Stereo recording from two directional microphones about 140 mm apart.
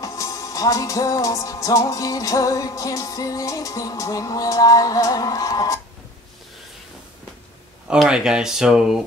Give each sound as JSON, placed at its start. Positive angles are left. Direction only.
{"t": 0.0, "sound": "music", "side_deg": 25}
{"t": 7.9, "sound": "speech", "side_deg": -5}